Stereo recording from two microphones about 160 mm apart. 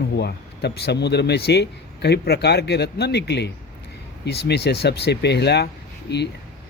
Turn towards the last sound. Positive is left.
turn(degrees=90)